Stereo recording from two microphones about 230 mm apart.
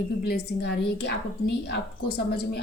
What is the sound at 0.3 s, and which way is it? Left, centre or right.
A woman's voice, left.